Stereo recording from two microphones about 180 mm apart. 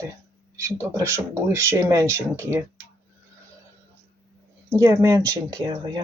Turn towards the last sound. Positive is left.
turn(degrees=-25)  # may be behind; listen again after turning